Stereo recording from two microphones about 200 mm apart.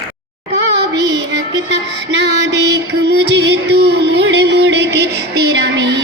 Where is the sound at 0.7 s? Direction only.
60° right (ahead or behind).